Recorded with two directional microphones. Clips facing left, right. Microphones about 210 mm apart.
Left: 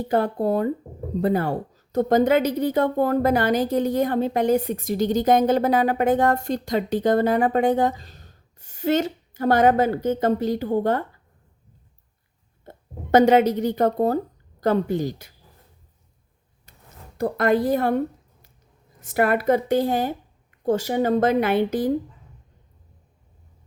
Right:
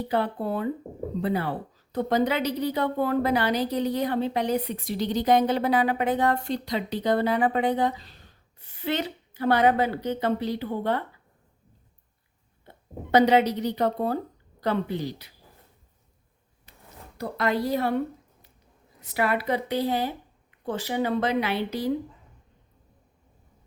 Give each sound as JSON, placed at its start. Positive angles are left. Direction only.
{"t": 0.0, "sound": "speech", "side_deg": 45}
{"t": 12.6, "sound": "a woman's voice", "side_deg": 45}
{"t": 17.2, "sound": "speech", "side_deg": 50}